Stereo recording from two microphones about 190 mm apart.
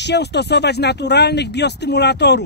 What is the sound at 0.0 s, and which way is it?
Speech, 65° left (ahead or behind).